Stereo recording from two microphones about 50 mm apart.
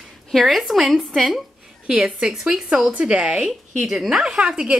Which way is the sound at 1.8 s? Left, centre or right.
Centre.